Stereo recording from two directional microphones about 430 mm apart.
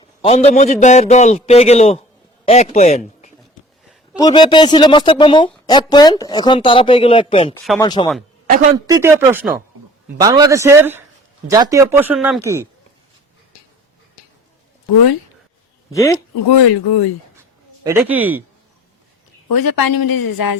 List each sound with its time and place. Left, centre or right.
0.2 s a man's voice: centre
8.7 s a man's voice: centre
15.9 s speech: centre
16.5 s speech: left
17.8 s speech: centre
19.5 s a woman's voice: left